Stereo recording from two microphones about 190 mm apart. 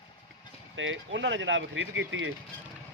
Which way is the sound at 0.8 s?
80° right.